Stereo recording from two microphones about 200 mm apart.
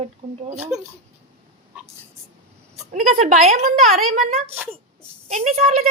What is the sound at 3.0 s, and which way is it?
Speech, 35° right (ahead or behind).